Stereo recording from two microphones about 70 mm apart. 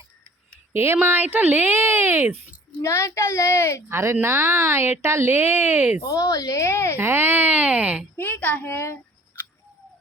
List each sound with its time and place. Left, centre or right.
0.7 s a woman's voice: right
2.8 s a child's voice: left
3.8 s a woman's voice: right
6.0 s a woman's voice: left
6.9 s speech: right
8.1 s a child's voice: left